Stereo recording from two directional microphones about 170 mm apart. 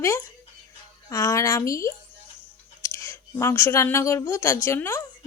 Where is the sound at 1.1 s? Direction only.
20° left (ahead or behind).